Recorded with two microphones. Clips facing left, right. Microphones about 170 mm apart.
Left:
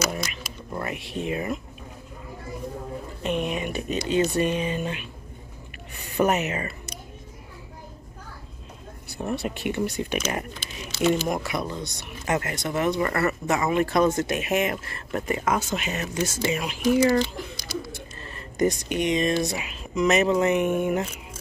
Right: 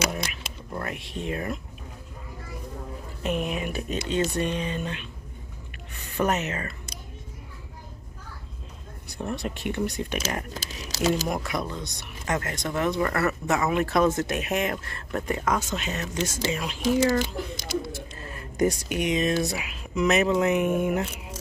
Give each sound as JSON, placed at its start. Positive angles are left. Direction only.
{"t": 0.3, "sound": "a sound", "side_deg": 5}
{"t": 3.2, "sound": "speech", "side_deg": 0}
{"t": 6.1, "sound": "speech", "side_deg": 10}
{"t": 9.1, "sound": "speech", "side_deg": 5}
{"t": 10.5, "sound": "speech", "side_deg": -40}
{"t": 11.2, "sound": "speech", "side_deg": 0}
{"t": 17.6, "sound": "a sound", "side_deg": -20}
{"t": 17.9, "sound": "speech", "side_deg": -5}